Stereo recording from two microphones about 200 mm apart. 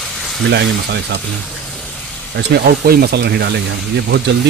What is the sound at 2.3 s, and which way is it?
Speech, 55° right (ahead or behind).